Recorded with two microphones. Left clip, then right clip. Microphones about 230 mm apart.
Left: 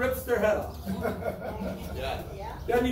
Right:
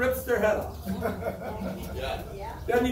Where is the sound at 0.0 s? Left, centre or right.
Centre.